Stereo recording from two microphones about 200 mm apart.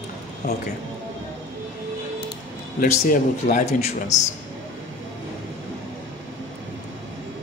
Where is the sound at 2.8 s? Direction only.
45° left (ahead or behind).